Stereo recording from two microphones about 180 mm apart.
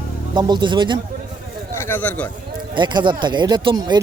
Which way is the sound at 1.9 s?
10° left (ahead or behind).